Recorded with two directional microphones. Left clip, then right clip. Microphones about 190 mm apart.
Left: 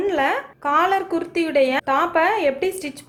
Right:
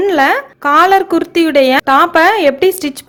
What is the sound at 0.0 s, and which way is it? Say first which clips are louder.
A woman's voice: right 9 dB; 45° right (ahead or behind).